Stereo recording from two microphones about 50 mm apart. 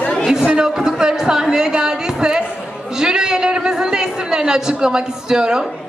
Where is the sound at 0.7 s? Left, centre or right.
Centre.